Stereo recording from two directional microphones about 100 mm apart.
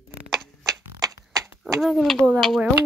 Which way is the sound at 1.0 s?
35° right (ahead or behind).